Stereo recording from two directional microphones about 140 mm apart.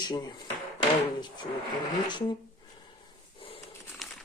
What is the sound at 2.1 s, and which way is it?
Speech, 35° left (ahead or behind).